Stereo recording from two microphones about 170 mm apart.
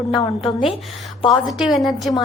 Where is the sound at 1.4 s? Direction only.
Centre (ahead or behind).